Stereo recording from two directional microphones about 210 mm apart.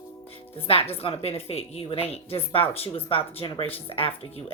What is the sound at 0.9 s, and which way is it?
Speech, 30° left (ahead or behind).